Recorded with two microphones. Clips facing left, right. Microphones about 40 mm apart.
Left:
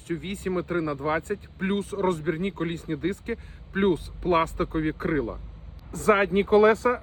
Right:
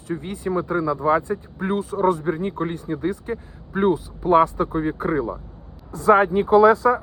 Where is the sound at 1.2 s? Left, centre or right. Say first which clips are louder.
Right 3 dB; left.